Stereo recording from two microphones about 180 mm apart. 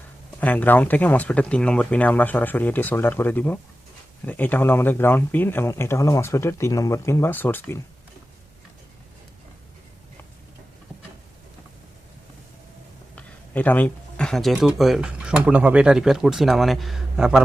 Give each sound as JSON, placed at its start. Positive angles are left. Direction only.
{"t": 0.3, "sound": "speech", "side_deg": 10}
{"t": 13.1, "sound": "speech", "side_deg": 10}